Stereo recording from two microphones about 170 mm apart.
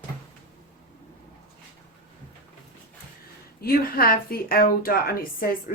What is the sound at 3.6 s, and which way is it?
A woman's voice, 60° left (ahead or behind).